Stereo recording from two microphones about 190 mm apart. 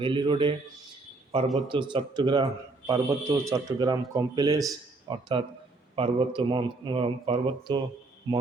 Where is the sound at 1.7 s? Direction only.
25° right (ahead or behind).